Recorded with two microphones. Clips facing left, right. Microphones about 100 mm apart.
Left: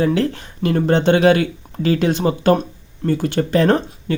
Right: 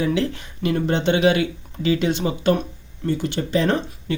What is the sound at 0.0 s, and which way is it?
Speech, 45° left (ahead or behind).